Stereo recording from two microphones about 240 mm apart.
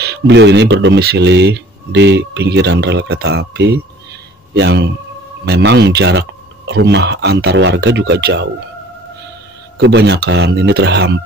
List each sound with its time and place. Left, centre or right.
0.0 s speech: right
9.8 s speech: right